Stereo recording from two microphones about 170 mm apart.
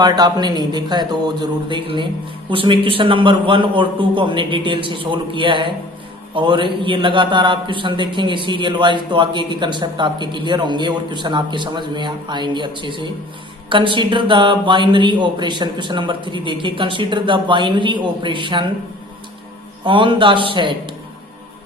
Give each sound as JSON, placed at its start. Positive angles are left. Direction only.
{"t": 0.0, "sound": "a man's voice", "side_deg": -25}
{"t": 19.8, "sound": "a man's voice", "side_deg": -30}